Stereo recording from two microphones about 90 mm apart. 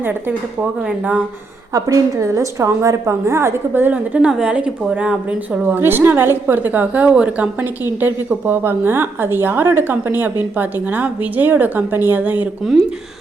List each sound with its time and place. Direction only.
0.0 s a woman's voice: 20° right (ahead or behind)
1.7 s a woman's voice: 35° right (ahead or behind); by 12.5 s 15° right (ahead or behind)